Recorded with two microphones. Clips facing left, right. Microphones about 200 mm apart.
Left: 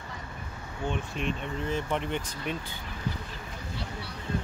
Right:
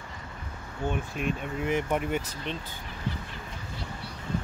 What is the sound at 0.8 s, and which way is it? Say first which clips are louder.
Speech: right 2 dB; 5° right (ahead or behind).